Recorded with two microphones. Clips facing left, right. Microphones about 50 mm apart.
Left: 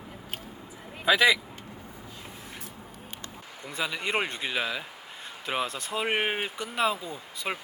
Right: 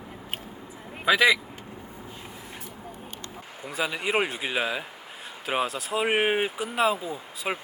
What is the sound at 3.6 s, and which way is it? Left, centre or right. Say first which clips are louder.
Speech: right 3 dB; centre.